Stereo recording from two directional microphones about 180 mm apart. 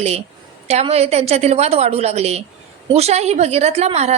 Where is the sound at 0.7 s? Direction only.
35° right (ahead or behind).